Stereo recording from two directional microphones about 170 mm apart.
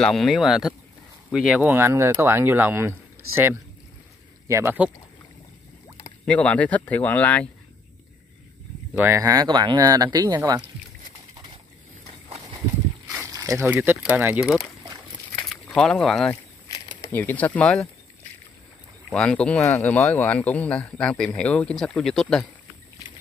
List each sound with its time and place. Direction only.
0.0 s speech: centre (ahead or behind)
6.2 s speech: 10° left (ahead or behind)
8.9 s speech: 15° right (ahead or behind)
13.3 s speech: 20° right (ahead or behind)
15.4 s speech: 5° left (ahead or behind)
16.7 s a sound: 25° left (ahead or behind)
17.1 s speech: 10° left (ahead or behind)
19.0 s speech: 5° left (ahead or behind)